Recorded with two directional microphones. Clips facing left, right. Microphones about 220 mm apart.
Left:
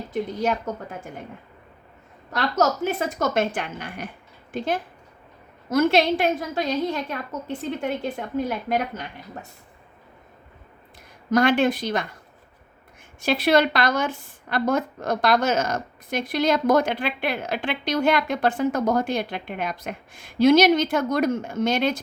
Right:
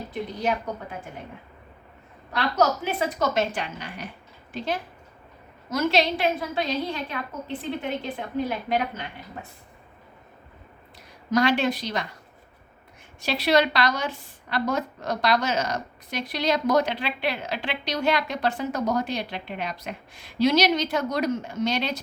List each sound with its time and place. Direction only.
0.1 s a woman's voice: 45° left (ahead or behind)
2.3 s a woman's voice: 45° left (ahead or behind)
11.3 s a woman's voice: 50° left (ahead or behind)
13.2 s a woman's voice: 50° left (ahead or behind)